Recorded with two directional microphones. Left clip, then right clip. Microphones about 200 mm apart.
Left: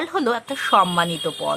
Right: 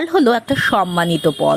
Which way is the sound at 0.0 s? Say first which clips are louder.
Right 7 dB; 25° right (ahead or behind).